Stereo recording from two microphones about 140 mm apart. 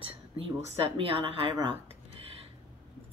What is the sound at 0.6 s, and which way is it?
Speech, 40° right (ahead or behind).